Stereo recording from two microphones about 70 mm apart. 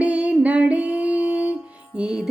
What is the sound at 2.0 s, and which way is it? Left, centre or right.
Speech, centre.